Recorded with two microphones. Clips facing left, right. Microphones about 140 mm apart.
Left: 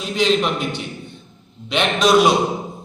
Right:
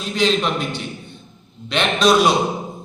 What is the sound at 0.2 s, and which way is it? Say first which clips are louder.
Speech: left 1 dB; 15° left (ahead or behind).